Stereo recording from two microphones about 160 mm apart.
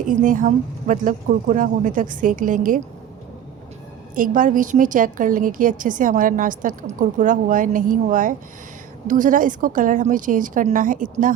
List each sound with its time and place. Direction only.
0.1 s a woman's voice: 55° right (ahead or behind)
4.1 s a woman's voice: 55° right (ahead or behind)